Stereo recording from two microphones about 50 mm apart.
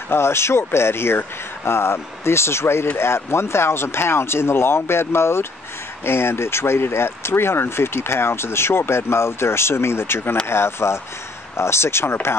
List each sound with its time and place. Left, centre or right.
0.1 s speech: left